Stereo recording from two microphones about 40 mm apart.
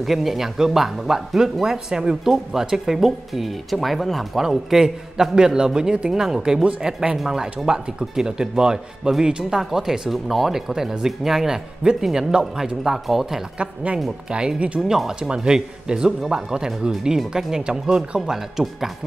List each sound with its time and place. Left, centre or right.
0.0 s speech: centre
12.8 s speech: centre
13.8 s a woman's voice: right
14.8 s speech: centre